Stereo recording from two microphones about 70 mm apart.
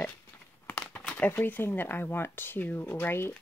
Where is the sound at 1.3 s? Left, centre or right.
Left.